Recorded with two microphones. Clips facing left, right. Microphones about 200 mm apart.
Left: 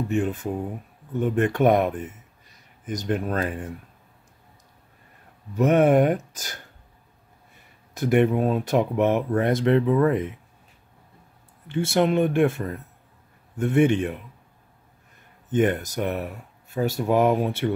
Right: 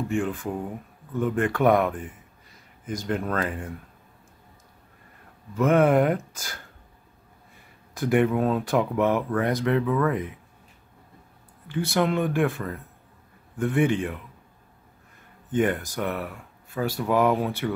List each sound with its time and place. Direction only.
0.1 s speech: 20° left (ahead or behind)
5.5 s speech: 20° left (ahead or behind)
7.9 s speech: 20° left (ahead or behind)
11.7 s speech: 25° left (ahead or behind)
15.5 s speech: 20° left (ahead or behind)